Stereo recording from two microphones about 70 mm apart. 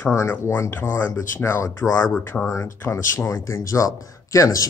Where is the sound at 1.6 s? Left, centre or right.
Left.